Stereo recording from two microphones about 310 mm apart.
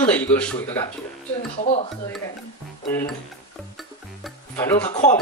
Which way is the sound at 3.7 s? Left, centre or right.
Centre.